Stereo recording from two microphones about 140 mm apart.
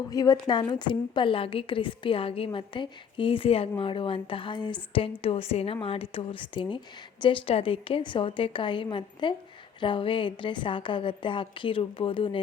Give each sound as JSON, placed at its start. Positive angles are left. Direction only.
{"t": 0.1, "sound": "a woman's voice", "side_deg": 25}